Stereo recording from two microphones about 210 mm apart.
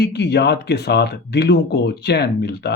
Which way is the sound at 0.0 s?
50° left (ahead or behind).